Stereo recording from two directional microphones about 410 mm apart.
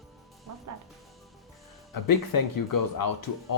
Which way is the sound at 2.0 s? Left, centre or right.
Left.